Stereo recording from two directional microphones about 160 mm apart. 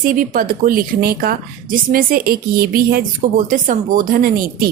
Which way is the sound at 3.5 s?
55° right (ahead or behind).